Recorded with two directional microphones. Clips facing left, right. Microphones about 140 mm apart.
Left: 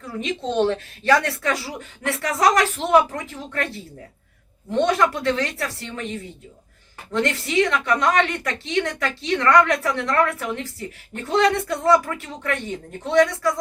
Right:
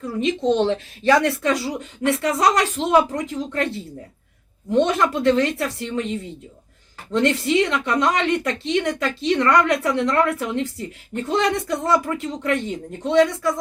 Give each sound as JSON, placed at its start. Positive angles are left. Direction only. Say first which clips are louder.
{"t": 0.2, "sound": "speech", "louder": "right 3 dB", "side_deg": -20}
{"t": 7.3, "sound": "speech", "louder": "right 2 dB", "side_deg": -20}